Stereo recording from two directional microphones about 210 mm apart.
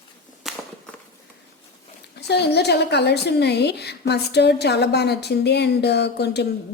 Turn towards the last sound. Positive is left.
turn(degrees=50)  # may be behind; listen again after turning